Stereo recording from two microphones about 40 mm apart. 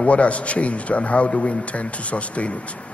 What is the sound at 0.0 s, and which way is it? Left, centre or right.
A man's voice, left.